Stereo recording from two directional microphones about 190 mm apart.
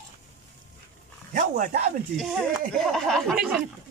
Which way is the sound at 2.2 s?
Centre (ahead or behind).